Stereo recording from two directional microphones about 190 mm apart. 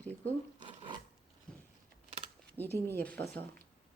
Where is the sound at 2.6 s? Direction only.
10° right (ahead or behind).